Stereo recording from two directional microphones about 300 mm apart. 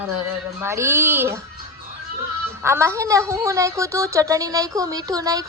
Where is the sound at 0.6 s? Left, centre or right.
Centre.